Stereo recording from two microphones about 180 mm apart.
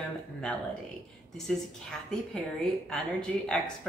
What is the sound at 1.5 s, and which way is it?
Speech, 5° left (ahead or behind).